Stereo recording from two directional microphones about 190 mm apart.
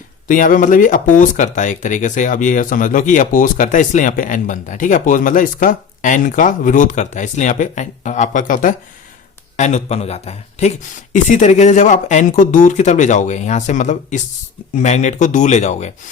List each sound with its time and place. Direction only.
0.3 s speech: 45° left (ahead or behind)